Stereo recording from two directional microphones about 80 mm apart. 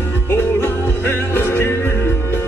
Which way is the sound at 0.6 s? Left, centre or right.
Left.